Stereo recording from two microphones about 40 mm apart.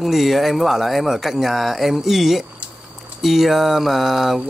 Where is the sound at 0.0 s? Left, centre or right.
Centre.